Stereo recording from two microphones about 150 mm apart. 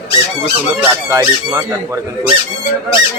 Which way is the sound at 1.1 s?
20° right (ahead or behind).